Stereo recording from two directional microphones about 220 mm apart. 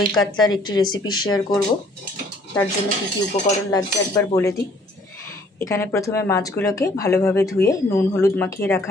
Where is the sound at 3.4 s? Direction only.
25° left (ahead or behind).